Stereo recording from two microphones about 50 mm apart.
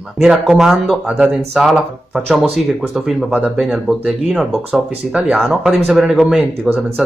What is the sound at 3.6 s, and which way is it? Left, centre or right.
Speech, centre.